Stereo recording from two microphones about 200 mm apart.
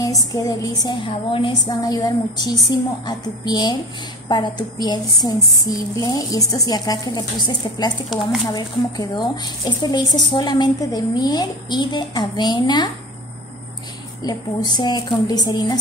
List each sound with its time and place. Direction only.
0.0 s speech: 15° left (ahead or behind)
14.2 s speech: 20° left (ahead or behind)